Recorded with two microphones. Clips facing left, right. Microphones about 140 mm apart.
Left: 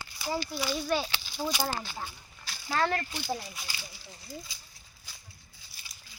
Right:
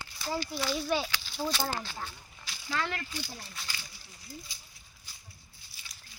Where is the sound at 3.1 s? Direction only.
75° left (ahead or behind).